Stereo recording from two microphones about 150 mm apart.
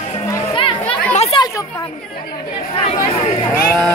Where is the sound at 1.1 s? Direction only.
45° left (ahead or behind).